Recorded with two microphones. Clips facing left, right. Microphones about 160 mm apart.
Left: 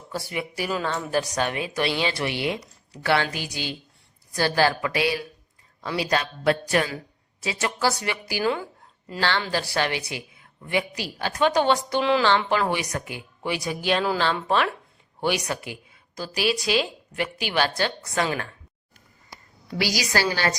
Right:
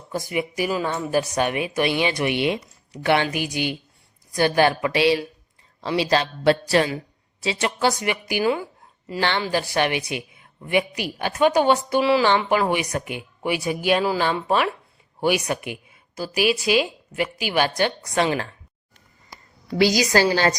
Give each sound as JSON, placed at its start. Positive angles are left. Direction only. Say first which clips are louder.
{"t": 0.1, "sound": "a woman's voice", "louder": "right 5 dB", "side_deg": -15}
{"t": 7.9, "sound": "a woman's voice", "louder": "right 4 dB", "side_deg": -15}
{"t": 19.8, "sound": "a woman's voice", "louder": "right 7 dB", "side_deg": -20}